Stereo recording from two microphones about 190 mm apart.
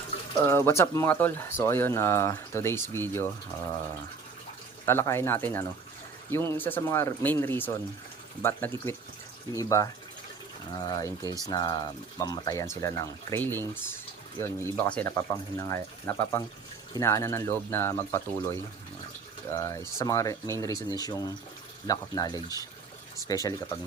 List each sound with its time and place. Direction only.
0.3 s speech: 15° left (ahead or behind)
4.9 s speech: 15° left (ahead or behind)